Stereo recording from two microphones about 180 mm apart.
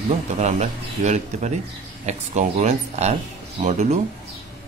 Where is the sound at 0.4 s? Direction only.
40° right (ahead or behind).